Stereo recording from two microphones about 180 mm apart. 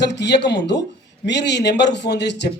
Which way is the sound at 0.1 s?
70° left (ahead or behind).